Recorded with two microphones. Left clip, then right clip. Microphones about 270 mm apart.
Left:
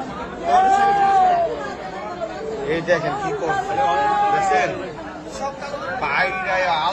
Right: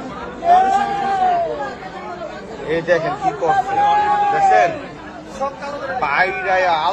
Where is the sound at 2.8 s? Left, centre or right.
Centre.